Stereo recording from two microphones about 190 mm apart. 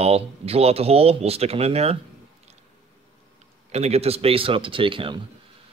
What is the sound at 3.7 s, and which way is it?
Speech, 35° right (ahead or behind).